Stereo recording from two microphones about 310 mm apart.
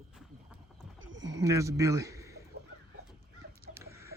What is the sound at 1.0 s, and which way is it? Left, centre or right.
Wild animals, right.